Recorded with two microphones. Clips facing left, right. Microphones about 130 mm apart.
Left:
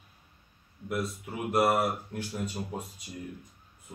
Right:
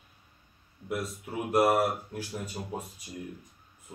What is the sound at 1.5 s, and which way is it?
Speech, 10° right (ahead or behind).